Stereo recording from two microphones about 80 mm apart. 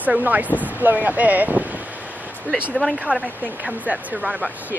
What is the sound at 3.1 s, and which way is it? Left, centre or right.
Speech, centre.